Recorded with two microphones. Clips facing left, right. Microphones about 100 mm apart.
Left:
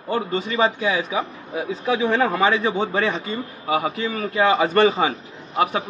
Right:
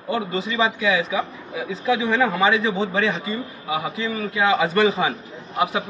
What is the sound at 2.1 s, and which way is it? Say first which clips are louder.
A man's voice: even; 45° left (ahead or behind).